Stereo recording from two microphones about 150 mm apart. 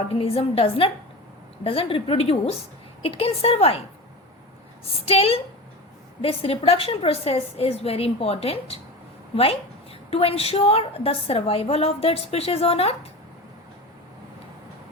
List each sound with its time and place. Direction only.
0.1 s a woman's voice: 40° left (ahead or behind)
4.9 s a woman's voice: 40° left (ahead or behind)